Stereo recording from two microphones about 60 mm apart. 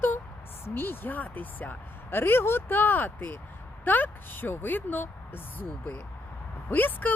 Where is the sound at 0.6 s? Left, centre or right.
Left.